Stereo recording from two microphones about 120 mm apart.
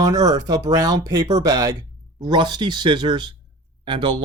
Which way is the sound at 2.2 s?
40° right (ahead or behind).